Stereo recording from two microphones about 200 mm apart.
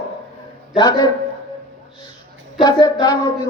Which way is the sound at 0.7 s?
20° left (ahead or behind).